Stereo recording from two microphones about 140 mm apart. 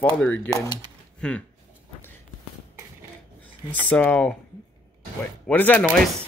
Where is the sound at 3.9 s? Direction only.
10° left (ahead or behind).